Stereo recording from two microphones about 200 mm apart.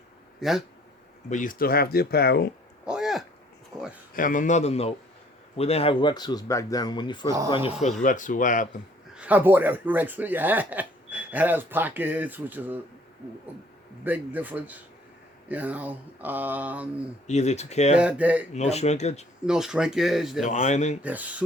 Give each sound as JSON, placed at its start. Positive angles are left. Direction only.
{"t": 0.3, "sound": "speech", "side_deg": 0}
{"t": 1.3, "sound": "speech", "side_deg": 40}
{"t": 2.8, "sound": "a sound", "side_deg": -5}
{"t": 4.1, "sound": "a man's voice", "side_deg": 40}
{"t": 8.0, "sound": "a man's voice", "side_deg": 40}
{"t": 9.1, "sound": "speech", "side_deg": -5}
{"t": 14.0, "sound": "speech", "side_deg": -10}
{"t": 17.2, "sound": "a man's voice", "side_deg": 35}
{"t": 17.9, "sound": "speech", "side_deg": -5}
{"t": 18.5, "sound": "a man's voice", "side_deg": 35}
{"t": 19.5, "sound": "speech", "side_deg": -5}
{"t": 20.4, "sound": "a man's voice", "side_deg": 35}
{"t": 21.0, "sound": "speech", "side_deg": -5}